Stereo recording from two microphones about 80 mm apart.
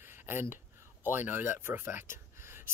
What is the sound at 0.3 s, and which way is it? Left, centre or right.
Speech, right.